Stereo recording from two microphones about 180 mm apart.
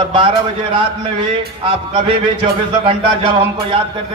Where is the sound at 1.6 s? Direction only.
30° right (ahead or behind).